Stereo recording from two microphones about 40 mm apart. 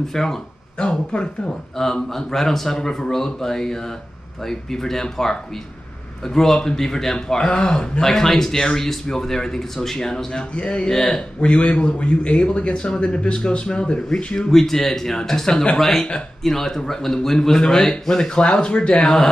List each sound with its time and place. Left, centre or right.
0.1 s a man's voice: centre
0.7 s speech: left
2.0 s a man's voice: centre
6.2 s a man's voice: centre
8.0 s a man's voice: centre
10.5 s speech: left
10.9 s a man's voice: centre
11.1 s a man's voice: left
18.3 s speech: left
18.9 s speech: centre